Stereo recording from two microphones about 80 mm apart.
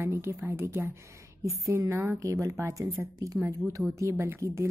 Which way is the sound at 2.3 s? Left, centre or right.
Right.